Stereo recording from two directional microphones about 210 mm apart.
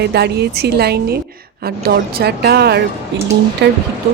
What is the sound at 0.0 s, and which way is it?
Speech, 50° right (ahead or behind).